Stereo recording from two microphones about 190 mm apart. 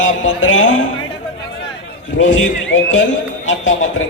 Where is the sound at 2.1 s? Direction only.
90° left.